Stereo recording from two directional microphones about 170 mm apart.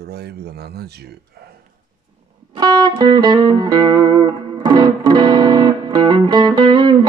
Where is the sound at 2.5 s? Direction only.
20° right (ahead or behind).